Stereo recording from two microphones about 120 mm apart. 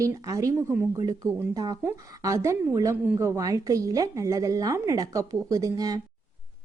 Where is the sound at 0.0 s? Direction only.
25° right (ahead or behind).